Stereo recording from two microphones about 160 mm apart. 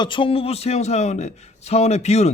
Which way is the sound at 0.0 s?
30° left (ahead or behind).